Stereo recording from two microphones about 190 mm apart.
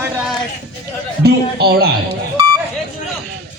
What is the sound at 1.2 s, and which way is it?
Speech, 55° right (ahead or behind).